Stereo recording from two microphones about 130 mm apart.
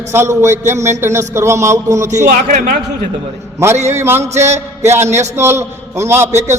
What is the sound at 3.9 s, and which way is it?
A man's voice, 20° right (ahead or behind).